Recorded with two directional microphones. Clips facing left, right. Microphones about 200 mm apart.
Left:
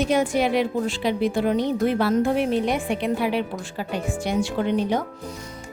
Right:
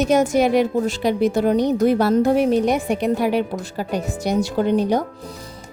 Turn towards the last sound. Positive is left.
turn(degrees=-40)  # may be behind; listen again after turning